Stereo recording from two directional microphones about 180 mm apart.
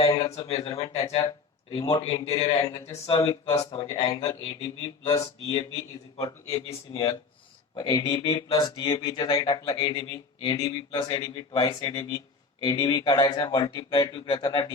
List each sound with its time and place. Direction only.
0.3 s speech: 30° left (ahead or behind)
6.7 s speech: 30° left (ahead or behind)